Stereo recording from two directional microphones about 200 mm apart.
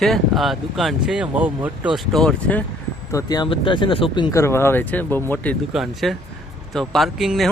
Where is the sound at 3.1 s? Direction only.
20° left (ahead or behind).